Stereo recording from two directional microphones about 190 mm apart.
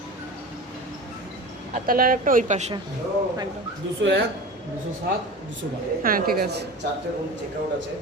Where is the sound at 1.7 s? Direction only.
50° right (ahead or behind).